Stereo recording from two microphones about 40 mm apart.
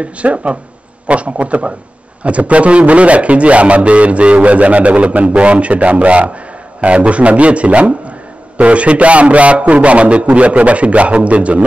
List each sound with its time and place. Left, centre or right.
0.0 s a man's voice: right